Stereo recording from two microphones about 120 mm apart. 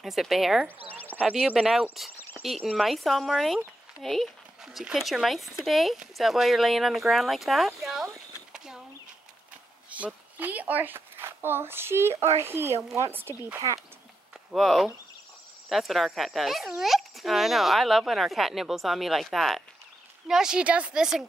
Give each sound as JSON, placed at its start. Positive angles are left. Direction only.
{"t": 0.0, "sound": "speech", "side_deg": 0}
{"t": 0.9, "sound": "speech", "side_deg": 15}
{"t": 1.2, "sound": "speech", "side_deg": -5}
{"t": 9.8, "sound": "speech", "side_deg": -10}
{"t": 14.5, "sound": "a woman's voice", "side_deg": 0}